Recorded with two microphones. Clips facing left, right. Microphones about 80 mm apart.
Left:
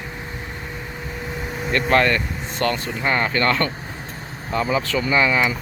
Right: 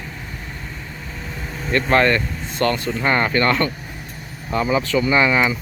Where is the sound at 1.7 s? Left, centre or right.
Right.